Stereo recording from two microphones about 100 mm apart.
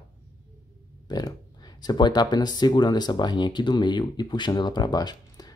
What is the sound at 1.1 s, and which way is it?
Speech, 40° left (ahead or behind).